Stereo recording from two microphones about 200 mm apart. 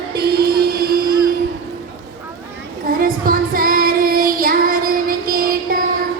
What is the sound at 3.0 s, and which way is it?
Child singing, 45° right (ahead or behind).